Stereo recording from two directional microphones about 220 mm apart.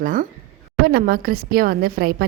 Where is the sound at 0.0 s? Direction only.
40° right (ahead or behind).